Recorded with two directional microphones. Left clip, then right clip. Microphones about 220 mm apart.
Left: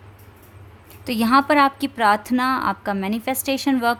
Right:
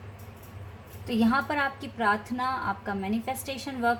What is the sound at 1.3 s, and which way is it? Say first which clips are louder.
A woman's voice: left 16 dB; 45° left (ahead or behind).